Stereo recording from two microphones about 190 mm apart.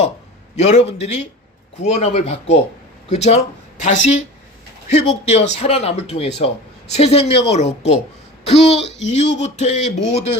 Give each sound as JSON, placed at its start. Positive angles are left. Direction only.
{"t": 0.5, "sound": "a man's voice", "side_deg": 35}